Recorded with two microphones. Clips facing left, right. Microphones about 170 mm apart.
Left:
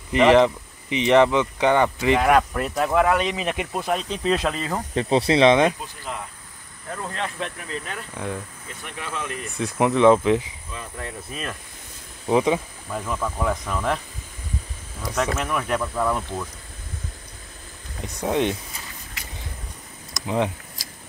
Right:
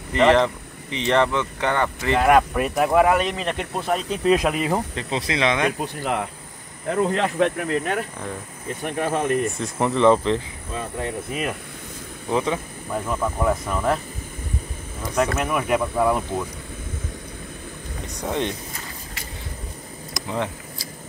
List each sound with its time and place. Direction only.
0.1 s speech: 15° left (ahead or behind)
2.2 s speech: 5° right (ahead or behind)
4.9 s speech: 30° left (ahead or behind)
5.8 s speech: 70° right (ahead or behind); by 9.5 s 55° right (ahead or behind)
9.6 s speech: 5° left (ahead or behind)
11.0 s speech: 20° right (ahead or behind)
12.3 s speech: 15° left (ahead or behind)
12.9 s speech: 10° right (ahead or behind)
15.3 s speech: 5° right (ahead or behind)
18.2 s speech: 15° left (ahead or behind)